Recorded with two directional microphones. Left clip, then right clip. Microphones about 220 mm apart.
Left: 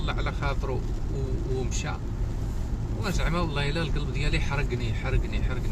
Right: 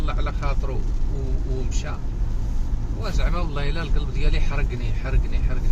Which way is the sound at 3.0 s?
20° left (ahead or behind).